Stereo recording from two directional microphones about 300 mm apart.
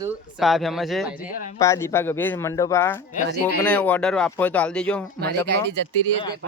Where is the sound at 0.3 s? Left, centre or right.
Centre.